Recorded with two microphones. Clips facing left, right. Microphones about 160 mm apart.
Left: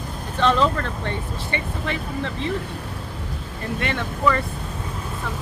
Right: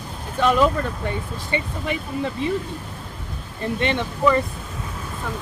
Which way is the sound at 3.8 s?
20° right (ahead or behind).